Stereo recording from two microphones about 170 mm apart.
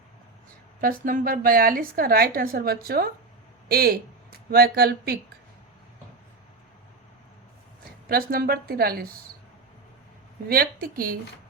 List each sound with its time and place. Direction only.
0.8 s a woman's voice: 55° right (ahead or behind)
8.0 s a woman's voice: 60° right (ahead or behind)
10.5 s a woman's voice: 60° right (ahead or behind)